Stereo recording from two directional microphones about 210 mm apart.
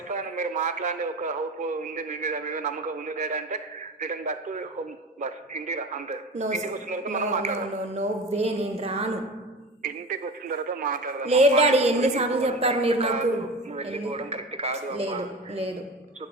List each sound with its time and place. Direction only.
0.1 s a man's voice: 35° right (ahead or behind)
9.8 s a man's voice: 40° right (ahead or behind)